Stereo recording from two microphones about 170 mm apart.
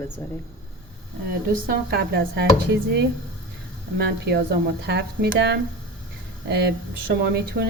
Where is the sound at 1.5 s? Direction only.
65° right (ahead or behind).